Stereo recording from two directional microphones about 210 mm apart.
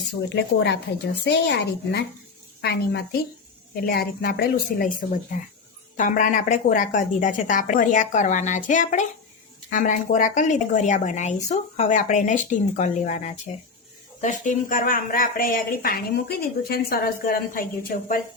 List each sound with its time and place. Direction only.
0.3 s a woman's voice: 50° left (ahead or behind)